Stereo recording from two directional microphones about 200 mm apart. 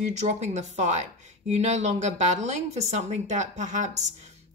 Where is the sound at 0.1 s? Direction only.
35° right (ahead or behind).